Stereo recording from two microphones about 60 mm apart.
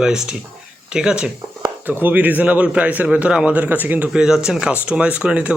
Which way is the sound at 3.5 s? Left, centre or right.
Right.